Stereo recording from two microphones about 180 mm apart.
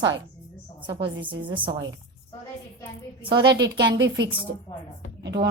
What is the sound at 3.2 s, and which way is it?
Speech, 25° right (ahead or behind).